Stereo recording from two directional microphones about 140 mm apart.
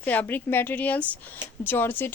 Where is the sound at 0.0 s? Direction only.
10° left (ahead or behind).